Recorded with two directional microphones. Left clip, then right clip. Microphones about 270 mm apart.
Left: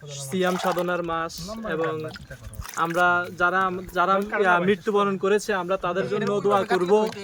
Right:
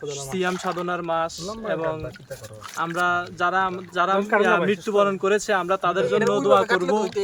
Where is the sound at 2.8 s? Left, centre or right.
Centre.